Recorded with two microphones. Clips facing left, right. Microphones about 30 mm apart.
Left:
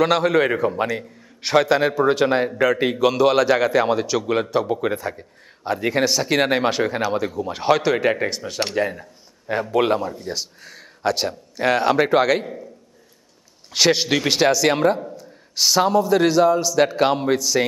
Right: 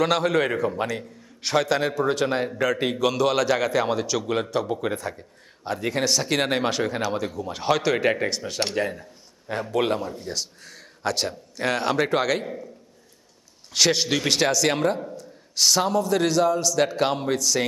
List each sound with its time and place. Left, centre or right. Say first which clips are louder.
0.0 s a man's voice: left 4 dB; centre
13.7 s a man's voice: left 3 dB; centre